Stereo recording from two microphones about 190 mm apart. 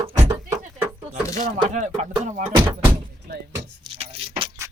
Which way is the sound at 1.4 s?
40° right (ahead or behind).